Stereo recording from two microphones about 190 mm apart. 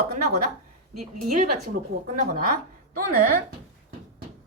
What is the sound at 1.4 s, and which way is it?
A woman's voice, 45° right (ahead or behind).